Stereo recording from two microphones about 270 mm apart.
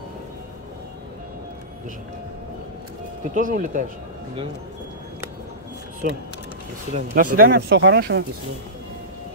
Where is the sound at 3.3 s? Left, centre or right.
Right.